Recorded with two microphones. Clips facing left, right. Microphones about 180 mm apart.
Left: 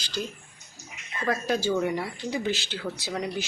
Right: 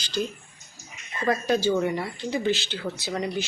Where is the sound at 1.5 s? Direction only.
5° left (ahead or behind).